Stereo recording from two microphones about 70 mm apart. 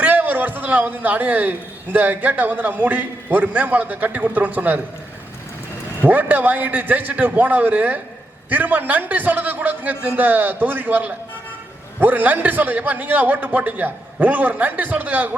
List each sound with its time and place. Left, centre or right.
0.0 s a man's voice: right
6.0 s a man's voice: right